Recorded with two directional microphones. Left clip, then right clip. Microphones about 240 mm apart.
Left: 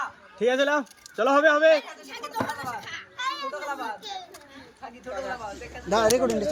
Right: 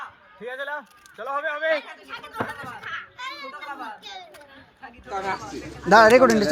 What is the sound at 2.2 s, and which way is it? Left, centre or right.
Speech, left.